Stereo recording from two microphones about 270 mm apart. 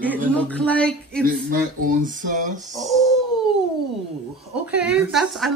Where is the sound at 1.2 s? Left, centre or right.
Right.